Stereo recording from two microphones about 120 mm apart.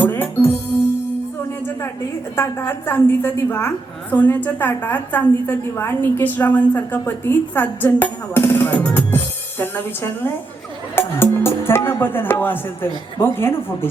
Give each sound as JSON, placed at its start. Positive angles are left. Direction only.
{"t": 0.0, "sound": "music", "side_deg": 15}
{"t": 2.3, "sound": "a woman's voice", "side_deg": 20}